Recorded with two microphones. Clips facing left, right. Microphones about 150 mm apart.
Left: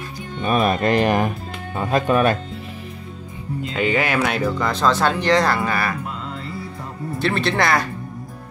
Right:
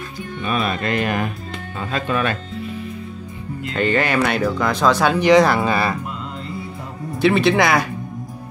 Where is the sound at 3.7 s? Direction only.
5° left (ahead or behind); by 6.0 s 20° right (ahead or behind).